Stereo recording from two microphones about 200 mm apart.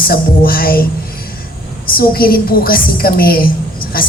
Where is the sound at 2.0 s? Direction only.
50° left (ahead or behind).